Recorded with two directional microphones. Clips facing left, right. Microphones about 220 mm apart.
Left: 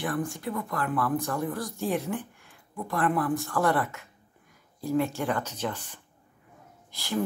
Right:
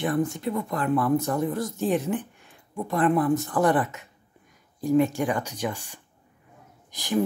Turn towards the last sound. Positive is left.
turn(degrees=-15)  # may be behind; listen again after turning